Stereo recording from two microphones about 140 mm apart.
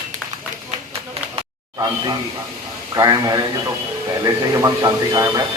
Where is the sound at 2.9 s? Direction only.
25° right (ahead or behind).